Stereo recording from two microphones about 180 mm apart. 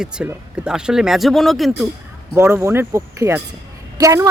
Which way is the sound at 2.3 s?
15° right (ahead or behind).